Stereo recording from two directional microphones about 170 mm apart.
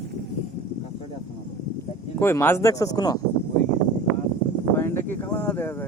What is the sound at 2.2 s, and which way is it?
Speech, 15° left (ahead or behind).